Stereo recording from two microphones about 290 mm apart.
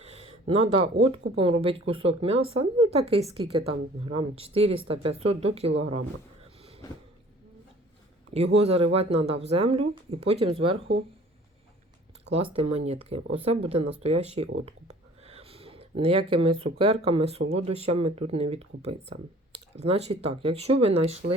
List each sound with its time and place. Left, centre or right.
0.0 s speech: right
6.6 s a sound: centre
8.5 s speech: right
12.5 s speech: centre
14.6 s a sound: right
17.5 s speech: right